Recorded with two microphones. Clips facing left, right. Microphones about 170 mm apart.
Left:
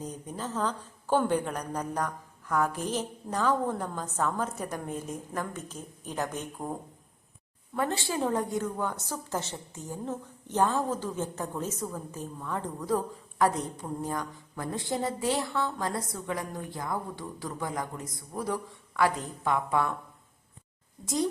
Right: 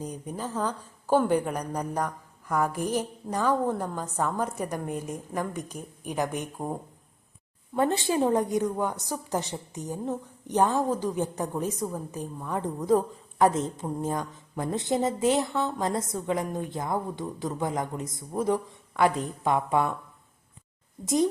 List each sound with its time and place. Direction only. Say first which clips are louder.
0.0 s a woman's voice: right 2 dB; 10° right (ahead or behind)
7.8 s a woman's voice: right 5 dB; 20° right (ahead or behind)
21.0 s a woman's voice: right 5 dB; 20° right (ahead or behind)